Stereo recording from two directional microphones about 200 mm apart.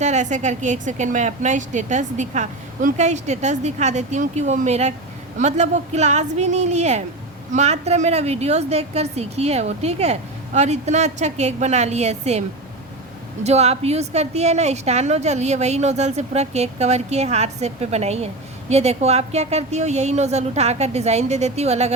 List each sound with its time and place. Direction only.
0.0 s a woman's voice: 35° right (ahead or behind)
13.4 s a woman's voice: 30° right (ahead or behind)